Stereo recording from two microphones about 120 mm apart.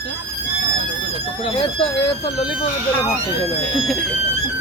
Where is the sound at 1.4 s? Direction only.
50° left (ahead or behind).